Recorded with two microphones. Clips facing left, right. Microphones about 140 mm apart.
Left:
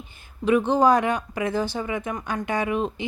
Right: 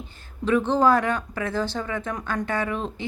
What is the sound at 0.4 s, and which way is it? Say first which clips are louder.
Speech: left 1 dB; 15° left (ahead or behind).